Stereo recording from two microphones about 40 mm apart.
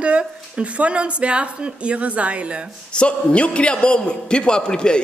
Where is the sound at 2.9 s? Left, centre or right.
Left.